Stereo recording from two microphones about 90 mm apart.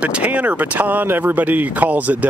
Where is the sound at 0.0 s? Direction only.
15° right (ahead or behind).